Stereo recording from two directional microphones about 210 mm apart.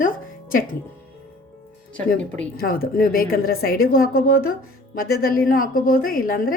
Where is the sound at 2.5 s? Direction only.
45° left (ahead or behind).